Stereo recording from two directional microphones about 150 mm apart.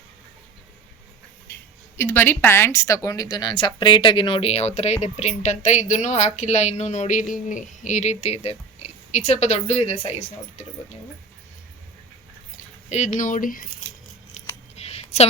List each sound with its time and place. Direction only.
2.0 s speech: 15° left (ahead or behind); by 10.7 s 45° left (ahead or behind)
12.9 s speech: 55° left (ahead or behind)
14.8 s a sound: 45° left (ahead or behind)